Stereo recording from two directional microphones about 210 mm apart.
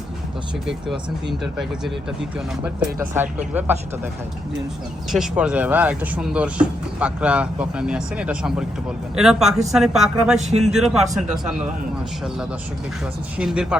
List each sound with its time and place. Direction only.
0.9 s speech: centre (ahead or behind)
5.1 s speech: 5° right (ahead or behind)
13.3 s speech: 5° right (ahead or behind)